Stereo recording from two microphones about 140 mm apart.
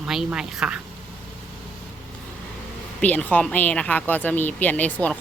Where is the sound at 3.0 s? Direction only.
10° left (ahead or behind).